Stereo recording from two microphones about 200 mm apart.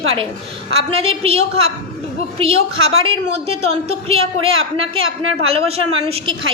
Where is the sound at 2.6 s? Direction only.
90° right.